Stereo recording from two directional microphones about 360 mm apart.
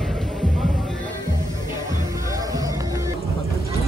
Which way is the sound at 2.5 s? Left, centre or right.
Centre.